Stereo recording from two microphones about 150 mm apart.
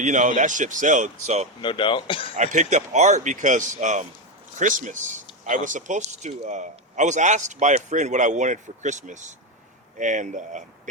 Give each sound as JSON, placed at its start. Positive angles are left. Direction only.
{"t": 0.0, "sound": "speech", "side_deg": -55}
{"t": 1.6, "sound": "speech", "side_deg": 35}
{"t": 2.3, "sound": "speech", "side_deg": -50}